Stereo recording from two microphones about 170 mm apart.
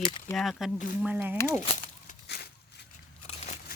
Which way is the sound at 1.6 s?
45° left (ahead or behind).